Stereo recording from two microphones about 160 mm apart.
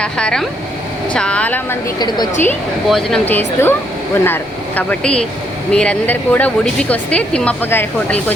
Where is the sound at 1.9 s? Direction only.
25° left (ahead or behind).